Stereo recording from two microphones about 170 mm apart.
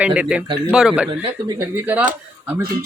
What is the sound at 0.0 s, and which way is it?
Speech, 5° right (ahead or behind).